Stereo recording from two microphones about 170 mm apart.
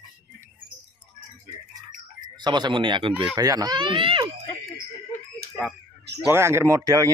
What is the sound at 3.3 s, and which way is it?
Speech, 20° right (ahead or behind).